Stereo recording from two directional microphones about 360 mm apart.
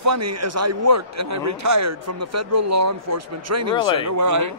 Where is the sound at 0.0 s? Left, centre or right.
Right.